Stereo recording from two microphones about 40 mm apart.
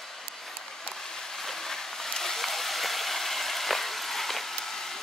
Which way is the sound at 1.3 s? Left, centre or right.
Centre.